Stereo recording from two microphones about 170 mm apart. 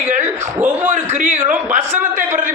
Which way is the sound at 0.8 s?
45° right (ahead or behind).